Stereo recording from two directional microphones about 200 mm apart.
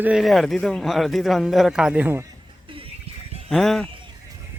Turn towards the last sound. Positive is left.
turn(degrees=0)  # may be behind; listen again after turning